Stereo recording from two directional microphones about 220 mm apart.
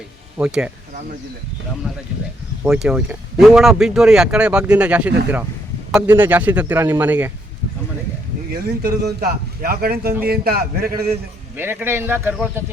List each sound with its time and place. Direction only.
0.3 s speech: 5° right (ahead or behind)
2.6 s a man's voice: centre (ahead or behind)
8.5 s a man's voice: 45° right (ahead or behind)
11.5 s a man's voice: 10° right (ahead or behind)